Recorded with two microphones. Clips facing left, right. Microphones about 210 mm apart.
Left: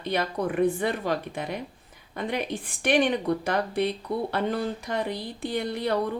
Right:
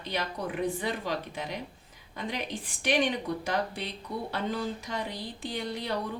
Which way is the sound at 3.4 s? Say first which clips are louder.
Left 6 dB; 55° left (ahead or behind).